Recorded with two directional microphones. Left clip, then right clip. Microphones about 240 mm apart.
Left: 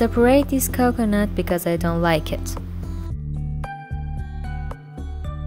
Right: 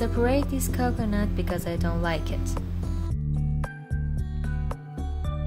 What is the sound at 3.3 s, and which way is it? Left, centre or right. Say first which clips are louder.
Music: even; centre.